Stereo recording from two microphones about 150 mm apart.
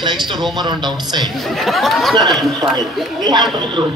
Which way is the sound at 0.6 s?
30° right (ahead or behind).